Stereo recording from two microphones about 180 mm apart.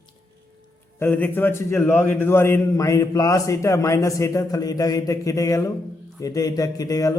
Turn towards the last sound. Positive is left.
turn(degrees=20)  # may be behind; listen again after turning